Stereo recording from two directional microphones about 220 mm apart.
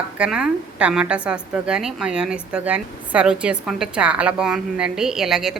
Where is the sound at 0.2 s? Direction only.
5° right (ahead or behind).